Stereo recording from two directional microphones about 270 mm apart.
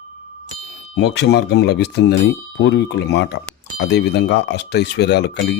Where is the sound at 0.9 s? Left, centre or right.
Left.